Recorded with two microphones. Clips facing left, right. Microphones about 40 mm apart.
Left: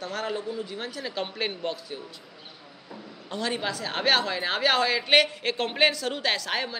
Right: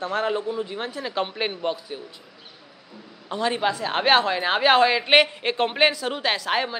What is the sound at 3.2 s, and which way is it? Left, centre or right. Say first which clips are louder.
A woman's voice: right 6 dB; centre.